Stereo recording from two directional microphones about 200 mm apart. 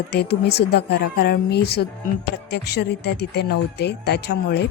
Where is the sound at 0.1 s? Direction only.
55° left (ahead or behind).